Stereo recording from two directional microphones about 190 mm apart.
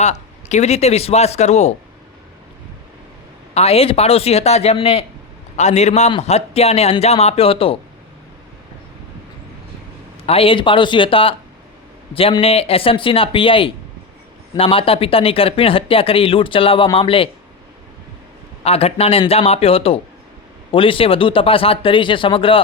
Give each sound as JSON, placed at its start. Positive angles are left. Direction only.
{"t": 0.0, "sound": "a man's voice", "side_deg": 35}
{"t": 3.5, "sound": "a man's voice", "side_deg": 30}
{"t": 10.2, "sound": "speech", "side_deg": 30}
{"t": 18.6, "sound": "a man's voice", "side_deg": 30}